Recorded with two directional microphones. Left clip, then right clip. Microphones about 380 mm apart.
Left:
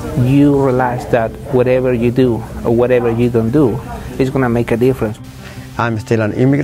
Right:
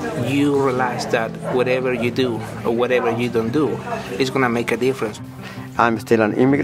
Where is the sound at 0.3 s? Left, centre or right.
Left.